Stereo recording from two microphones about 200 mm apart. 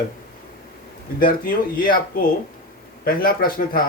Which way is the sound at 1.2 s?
45° left (ahead or behind).